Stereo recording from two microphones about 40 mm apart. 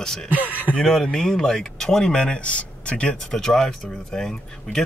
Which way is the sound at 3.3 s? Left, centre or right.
Centre.